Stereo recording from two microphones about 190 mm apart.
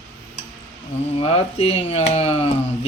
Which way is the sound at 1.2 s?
30° left (ahead or behind).